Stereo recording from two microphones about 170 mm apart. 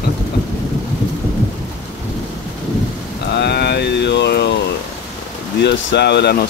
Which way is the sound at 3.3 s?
80° left.